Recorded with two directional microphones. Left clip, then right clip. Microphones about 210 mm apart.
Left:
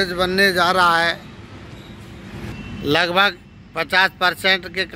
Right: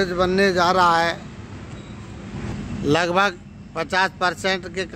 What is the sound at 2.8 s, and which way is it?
A man's voice, centre (ahead or behind).